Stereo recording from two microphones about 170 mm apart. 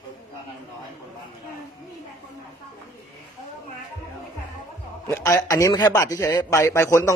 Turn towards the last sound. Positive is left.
turn(degrees=15)  # may be behind; listen again after turning